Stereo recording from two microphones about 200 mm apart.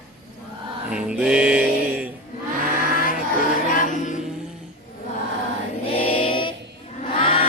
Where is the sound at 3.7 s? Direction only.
40° left (ahead or behind).